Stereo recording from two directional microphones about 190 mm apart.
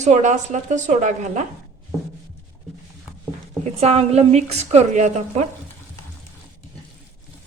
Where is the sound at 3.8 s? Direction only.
35° right (ahead or behind).